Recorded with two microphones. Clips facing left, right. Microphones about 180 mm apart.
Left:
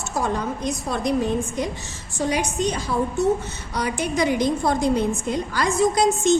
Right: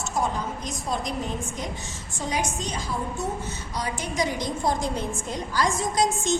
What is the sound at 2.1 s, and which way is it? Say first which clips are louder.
Speech: left 6 dB; 70° left (ahead or behind).